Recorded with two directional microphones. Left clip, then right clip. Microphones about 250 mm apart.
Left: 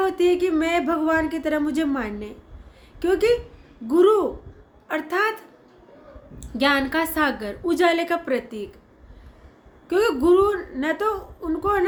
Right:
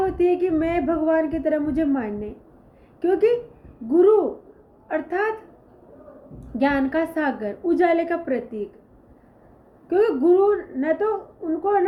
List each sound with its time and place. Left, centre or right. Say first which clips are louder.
0.0 s speech: even; centre
6.6 s speech: left 1 dB; centre
9.9 s speech: even; centre